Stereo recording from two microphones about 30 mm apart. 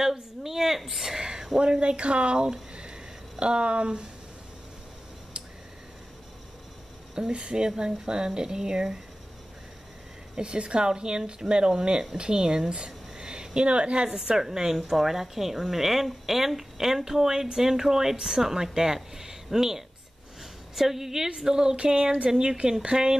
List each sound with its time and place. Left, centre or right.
0.0 s a sound: centre
1.6 s speech: right
2.7 s a sound: right
5.4 s tick: right
7.2 s speech: right
10.4 s speech: right
14.3 s speech: centre
22.6 s speech: right